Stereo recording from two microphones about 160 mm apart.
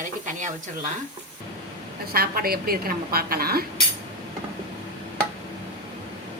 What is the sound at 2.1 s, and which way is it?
A woman's voice, 70° right (ahead or behind).